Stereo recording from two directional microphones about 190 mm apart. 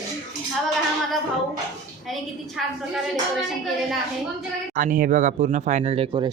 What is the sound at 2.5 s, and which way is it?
Speech, centre (ahead or behind).